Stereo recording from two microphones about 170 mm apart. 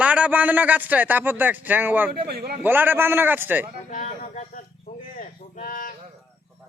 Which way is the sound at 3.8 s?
45° left (ahead or behind).